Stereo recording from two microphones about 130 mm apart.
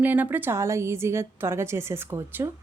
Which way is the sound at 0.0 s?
15° right (ahead or behind).